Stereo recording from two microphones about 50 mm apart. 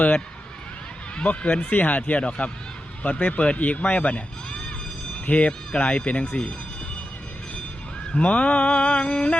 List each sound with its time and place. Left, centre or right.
1.1 s speech: left
8.1 s speech: left